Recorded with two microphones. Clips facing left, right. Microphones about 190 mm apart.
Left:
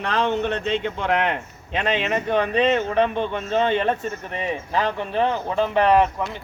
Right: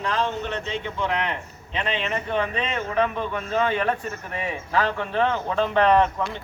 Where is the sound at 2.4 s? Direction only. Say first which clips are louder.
Left 10 dB; 35° left (ahead or behind).